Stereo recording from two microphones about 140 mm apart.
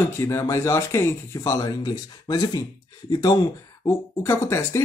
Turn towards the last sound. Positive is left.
turn(degrees=20)  # may be behind; listen again after turning